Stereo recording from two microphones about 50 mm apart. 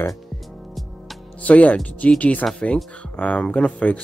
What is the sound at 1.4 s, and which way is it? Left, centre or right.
Speech, left.